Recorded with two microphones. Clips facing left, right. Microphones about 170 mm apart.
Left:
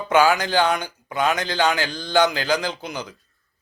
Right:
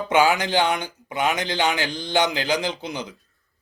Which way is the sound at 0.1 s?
20° right (ahead or behind).